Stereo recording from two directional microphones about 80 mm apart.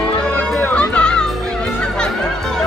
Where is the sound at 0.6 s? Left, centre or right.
Centre.